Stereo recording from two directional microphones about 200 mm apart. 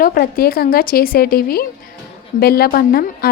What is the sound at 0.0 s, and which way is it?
Speech, 45° left (ahead or behind).